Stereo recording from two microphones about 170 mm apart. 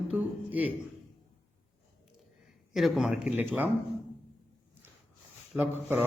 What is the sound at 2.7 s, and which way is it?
Speech, centre (ahead or behind).